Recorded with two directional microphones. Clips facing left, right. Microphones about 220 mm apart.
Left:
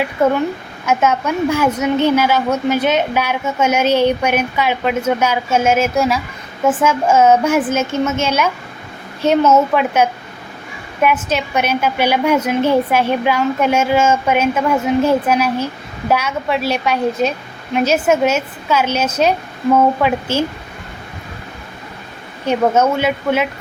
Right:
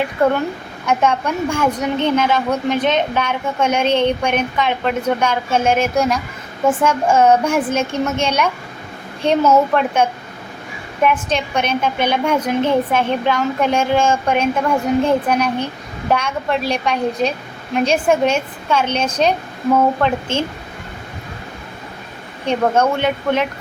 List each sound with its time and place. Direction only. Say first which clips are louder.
0.2 s a woman's voice: left 2 dB; centre (ahead or behind)
9.5 s a woman's voice: left 1 dB; 5° left (ahead or behind)
22.4 s a woman's voice: left 2 dB; 5° left (ahead or behind)